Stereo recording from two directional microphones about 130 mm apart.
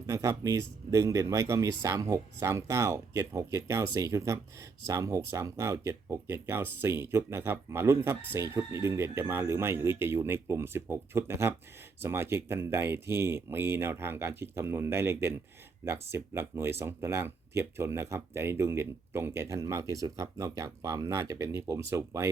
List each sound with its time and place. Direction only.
0.1 s speech: 25° right (ahead or behind)